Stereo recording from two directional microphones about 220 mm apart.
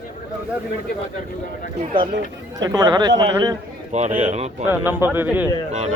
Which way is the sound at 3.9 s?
30° right (ahead or behind).